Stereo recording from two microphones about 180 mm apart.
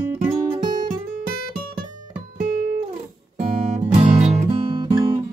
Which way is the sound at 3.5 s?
45° right (ahead or behind).